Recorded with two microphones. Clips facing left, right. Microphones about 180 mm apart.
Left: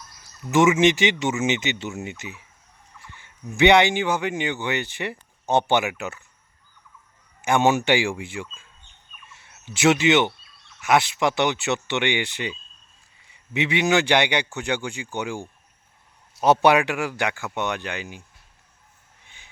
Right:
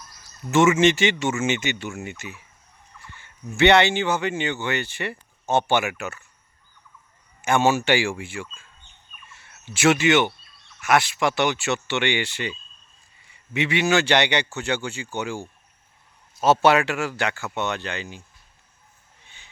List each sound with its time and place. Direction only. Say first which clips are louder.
0.5 s speech: even; 15° left (ahead or behind)
3.5 s speech: left 1 dB; 15° left (ahead or behind)
7.4 s speech: left 1 dB; 15° left (ahead or behind)
9.7 s speech: even; 20° left (ahead or behind)